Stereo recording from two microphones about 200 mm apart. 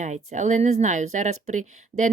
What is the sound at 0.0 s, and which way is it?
A woman's voice, 35° right (ahead or behind).